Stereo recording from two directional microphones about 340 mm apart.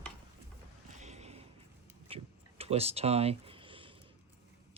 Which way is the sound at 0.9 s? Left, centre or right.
Centre.